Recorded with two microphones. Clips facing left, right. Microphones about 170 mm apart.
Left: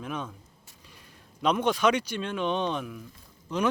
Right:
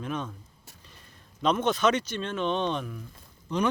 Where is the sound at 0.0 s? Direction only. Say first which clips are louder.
Right 2 dB; 5° left (ahead or behind).